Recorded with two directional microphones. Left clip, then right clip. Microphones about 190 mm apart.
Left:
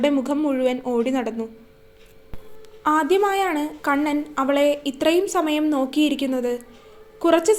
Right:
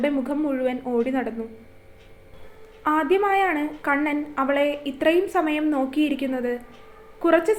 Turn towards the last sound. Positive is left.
turn(degrees=35)  # may be behind; listen again after turning